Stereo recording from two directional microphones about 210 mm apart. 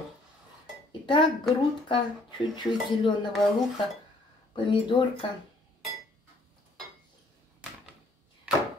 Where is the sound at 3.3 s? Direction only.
Centre (ahead or behind).